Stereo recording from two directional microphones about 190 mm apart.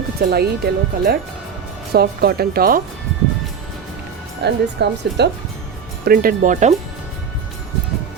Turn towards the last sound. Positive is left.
turn(degrees=-40)  # may be behind; listen again after turning